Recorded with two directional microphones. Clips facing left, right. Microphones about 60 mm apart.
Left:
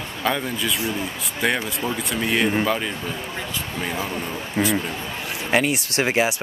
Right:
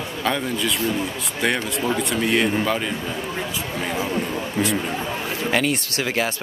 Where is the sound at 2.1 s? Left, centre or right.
Centre.